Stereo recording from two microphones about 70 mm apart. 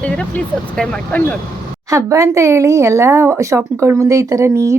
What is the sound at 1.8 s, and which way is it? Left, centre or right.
A woman's voice, right.